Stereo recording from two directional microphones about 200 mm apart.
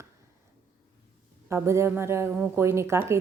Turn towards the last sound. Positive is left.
turn(degrees=-15)  # may be behind; listen again after turning